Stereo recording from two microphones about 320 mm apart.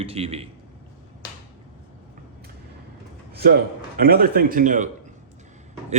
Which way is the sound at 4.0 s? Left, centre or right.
Right.